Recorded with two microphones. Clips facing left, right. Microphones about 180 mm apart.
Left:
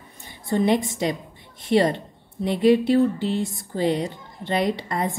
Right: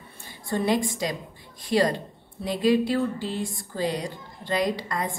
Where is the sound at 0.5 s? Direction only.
20° left (ahead or behind).